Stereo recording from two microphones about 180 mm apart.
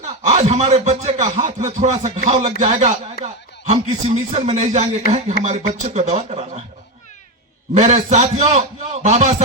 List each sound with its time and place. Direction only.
0.0 s a man's voice: 45° right (ahead or behind)
7.7 s a man's voice: 40° right (ahead or behind)